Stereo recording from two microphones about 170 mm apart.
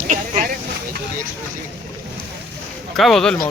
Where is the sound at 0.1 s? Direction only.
50° right (ahead or behind).